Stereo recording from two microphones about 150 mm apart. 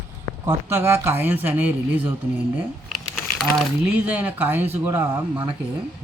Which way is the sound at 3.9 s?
10° right (ahead or behind).